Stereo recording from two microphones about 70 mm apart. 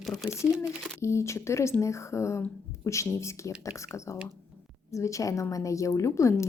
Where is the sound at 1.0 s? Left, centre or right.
Left.